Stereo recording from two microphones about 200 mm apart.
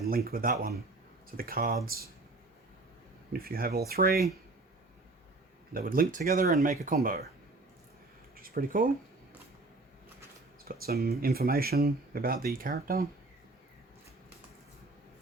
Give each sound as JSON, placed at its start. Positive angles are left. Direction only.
{"t": 0.0, "sound": "speech", "side_deg": -50}
{"t": 3.3, "sound": "speech", "side_deg": -50}
{"t": 5.7, "sound": "speech", "side_deg": -45}
{"t": 8.4, "sound": "speech", "side_deg": -45}
{"t": 10.7, "sound": "speech", "side_deg": -50}